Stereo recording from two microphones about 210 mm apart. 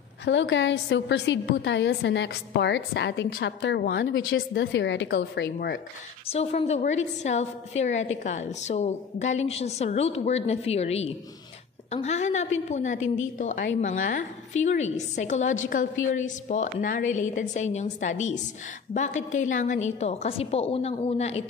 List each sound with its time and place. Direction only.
0.2 s a woman's voice: 60° left (ahead or behind)
6.2 s a woman's voice: 30° left (ahead or behind)